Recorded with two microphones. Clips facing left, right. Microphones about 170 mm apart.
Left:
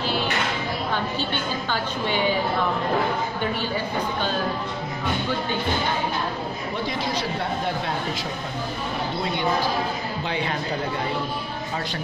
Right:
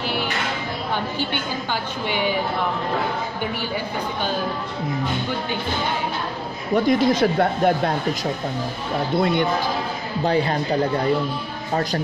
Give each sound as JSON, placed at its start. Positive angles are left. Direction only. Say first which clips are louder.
{"t": 1.3, "sound": "a woman's voice", "louder": "right 1 dB", "side_deg": -15}
{"t": 6.7, "sound": "speech", "louder": "right 12 dB", "side_deg": -45}
{"t": 10.2, "sound": "a man's voice", "louder": "right 9 dB", "side_deg": -40}